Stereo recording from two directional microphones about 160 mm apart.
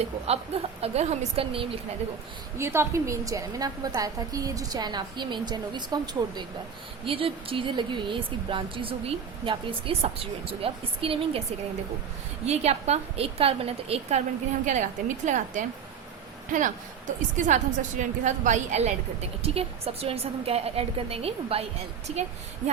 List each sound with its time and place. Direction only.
0.0 s speech: 40° right (ahead or behind)
2.6 s a woman's voice: 15° right (ahead or behind); by 11.4 s 35° right (ahead or behind)
12.5 s speech: 45° right (ahead or behind)
14.7 s a woman's voice: 50° right (ahead or behind)